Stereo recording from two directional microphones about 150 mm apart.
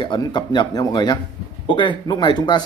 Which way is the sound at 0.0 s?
30° left (ahead or behind).